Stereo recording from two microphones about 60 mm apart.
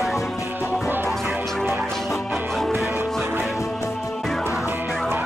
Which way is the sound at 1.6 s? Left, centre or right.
Right.